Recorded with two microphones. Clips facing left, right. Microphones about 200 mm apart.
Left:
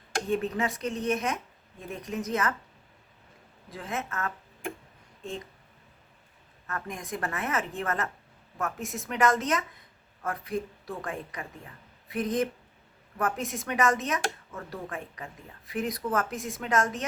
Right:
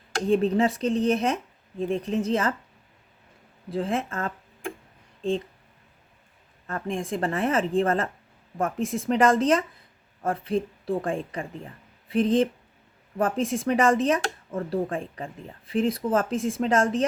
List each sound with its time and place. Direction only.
0.3 s a woman's voice: 30° right (ahead or behind)
3.7 s speech: 30° right (ahead or behind)
6.7 s a woman's voice: 30° right (ahead or behind)